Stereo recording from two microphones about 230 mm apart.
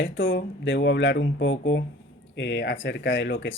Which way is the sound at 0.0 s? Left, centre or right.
Left.